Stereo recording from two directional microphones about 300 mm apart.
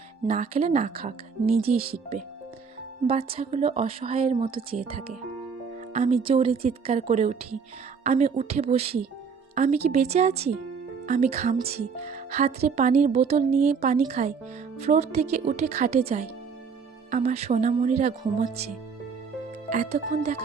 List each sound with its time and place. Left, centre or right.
0.3 s speech: right
5.9 s speech: right
19.7 s speech: right